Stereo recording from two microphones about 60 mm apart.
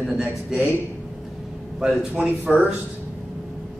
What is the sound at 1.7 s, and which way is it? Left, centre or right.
Speech, centre.